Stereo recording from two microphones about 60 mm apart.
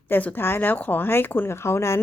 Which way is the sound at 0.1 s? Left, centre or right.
Left.